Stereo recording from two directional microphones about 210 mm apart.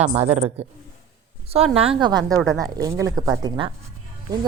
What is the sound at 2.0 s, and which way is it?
Speech, 20° right (ahead or behind).